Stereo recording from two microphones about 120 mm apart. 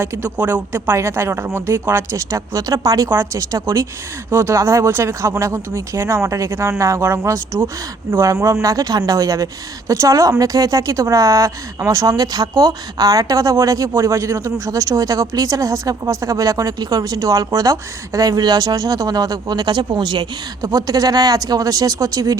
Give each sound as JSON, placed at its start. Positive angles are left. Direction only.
{"t": 0.0, "sound": "a woman's voice", "side_deg": -20}